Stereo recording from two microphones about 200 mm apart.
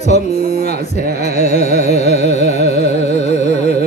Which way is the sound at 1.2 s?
35° left (ahead or behind).